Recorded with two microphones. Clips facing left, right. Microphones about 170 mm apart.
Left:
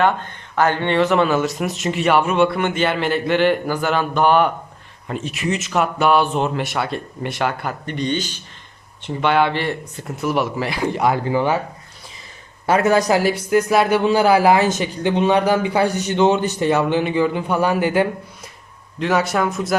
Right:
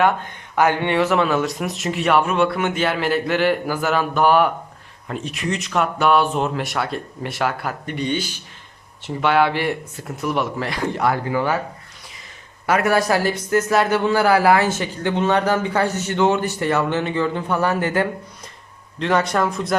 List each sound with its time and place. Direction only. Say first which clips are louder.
0.0 s speech: even; 10° right (ahead or behind)
10.2 s speech: left 2 dB; 5° left (ahead or behind)
10.9 s speech: left 2 dB; 20° left (ahead or behind)
12.6 s a man's voice: left 2 dB; 25° left (ahead or behind)
18.9 s speech: even; 5° left (ahead or behind)